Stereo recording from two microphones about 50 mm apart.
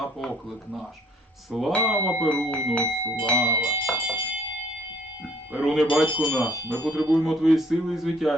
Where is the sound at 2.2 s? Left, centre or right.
Left.